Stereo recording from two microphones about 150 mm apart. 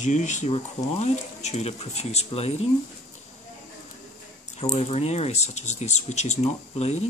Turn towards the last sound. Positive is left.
turn(degrees=45)  # may be behind; listen again after turning